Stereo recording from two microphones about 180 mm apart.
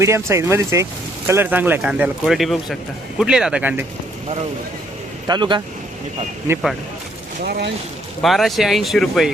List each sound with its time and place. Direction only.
0.0 s speech: 15° right (ahead or behind)
5.3 s speech: 25° right (ahead or behind)
7.4 s speech: 65° right (ahead or behind)
8.2 s speech: centre (ahead or behind)